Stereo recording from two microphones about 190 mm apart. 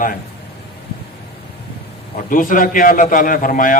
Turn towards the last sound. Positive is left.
turn(degrees=45)  # may be behind; listen again after turning